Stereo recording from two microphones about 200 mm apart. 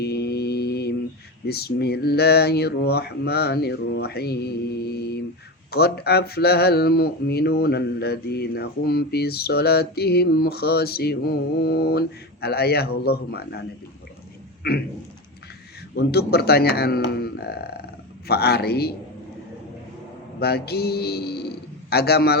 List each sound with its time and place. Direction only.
0.0 s mantra: 55° left (ahead or behind)
1.5 s speech: 50° left (ahead or behind)
14.6 s speech: 50° left (ahead or behind)
16.0 s speech: 55° left (ahead or behind)
20.4 s speech: 50° left (ahead or behind)